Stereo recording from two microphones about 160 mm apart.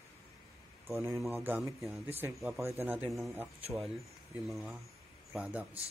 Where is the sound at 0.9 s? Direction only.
20° right (ahead or behind).